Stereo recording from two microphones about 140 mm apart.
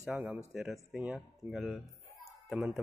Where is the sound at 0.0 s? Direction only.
10° right (ahead or behind).